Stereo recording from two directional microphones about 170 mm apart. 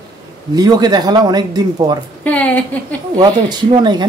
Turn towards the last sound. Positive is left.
turn(degrees=-25)  # may be behind; listen again after turning